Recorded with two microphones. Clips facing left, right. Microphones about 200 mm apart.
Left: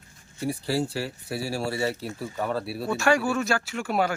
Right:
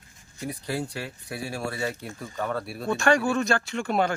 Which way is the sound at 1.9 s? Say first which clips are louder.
Left 4 dB; 5° left (ahead or behind).